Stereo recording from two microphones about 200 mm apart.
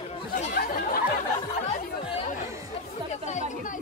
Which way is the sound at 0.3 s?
45° left (ahead or behind).